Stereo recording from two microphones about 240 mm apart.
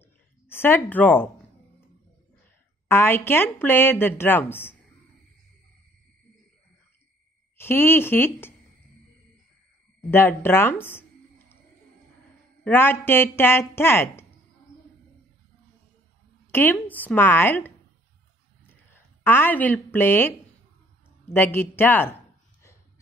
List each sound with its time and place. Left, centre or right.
0.5 s a woman's voice: centre
2.9 s a woman's voice: centre
7.5 s a woman's voice: centre
10.1 s speech: centre
12.6 s a woman's voice: centre
16.5 s a woman's voice: centre